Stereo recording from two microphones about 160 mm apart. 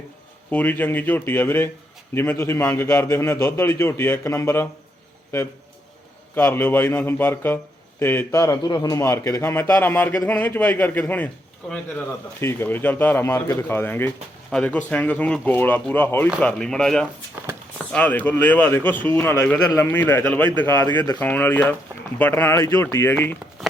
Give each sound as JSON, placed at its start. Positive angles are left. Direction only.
{"t": 0.5, "sound": "speech", "side_deg": 10}
{"t": 6.3, "sound": "speech", "side_deg": 15}